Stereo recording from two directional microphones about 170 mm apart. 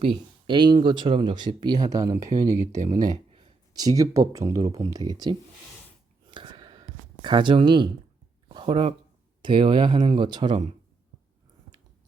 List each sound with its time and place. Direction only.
0.0 s speech: 30° right (ahead or behind)
6.3 s a sound: 30° right (ahead or behind)
9.4 s speech: 30° right (ahead or behind)